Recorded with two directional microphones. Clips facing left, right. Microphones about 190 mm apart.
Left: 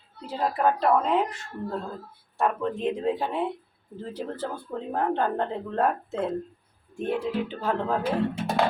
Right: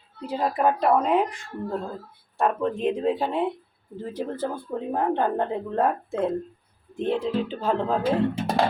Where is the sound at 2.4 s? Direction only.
15° right (ahead or behind).